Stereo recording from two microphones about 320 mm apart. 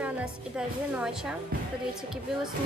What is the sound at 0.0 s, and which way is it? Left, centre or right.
A woman's voice, centre.